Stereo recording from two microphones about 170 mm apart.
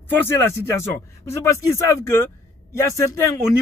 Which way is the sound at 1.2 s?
15° left (ahead or behind).